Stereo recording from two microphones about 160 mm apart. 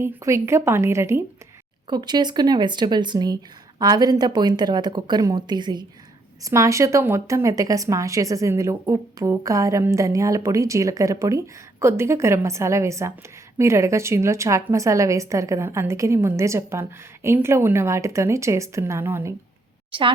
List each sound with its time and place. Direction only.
0.0 s a woman's voice: 15° right (ahead or behind)
19.9 s speech: 30° right (ahead or behind)